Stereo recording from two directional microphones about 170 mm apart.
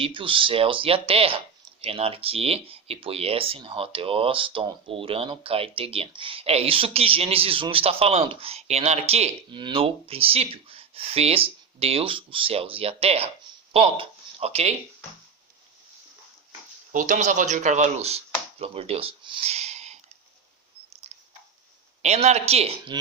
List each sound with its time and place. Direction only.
0.0 s speech: 30° right (ahead or behind)
16.9 s speech: 50° right (ahead or behind)
21.0 s patter: 40° right (ahead or behind)
22.0 s speech: 40° right (ahead or behind)